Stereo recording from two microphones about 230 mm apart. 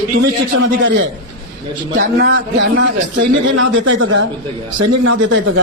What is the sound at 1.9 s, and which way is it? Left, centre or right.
A man's voice, right.